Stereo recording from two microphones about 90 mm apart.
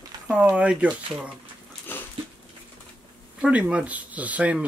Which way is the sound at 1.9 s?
25° left (ahead or behind).